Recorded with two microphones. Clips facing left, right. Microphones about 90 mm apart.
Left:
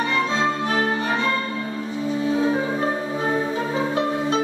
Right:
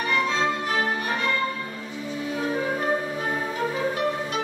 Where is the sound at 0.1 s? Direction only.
30° left (ahead or behind).